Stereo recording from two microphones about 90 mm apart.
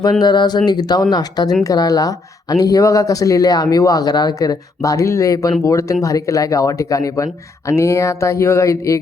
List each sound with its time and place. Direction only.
0.0 s speech: 50° left (ahead or behind); by 9.0 s 35° left (ahead or behind)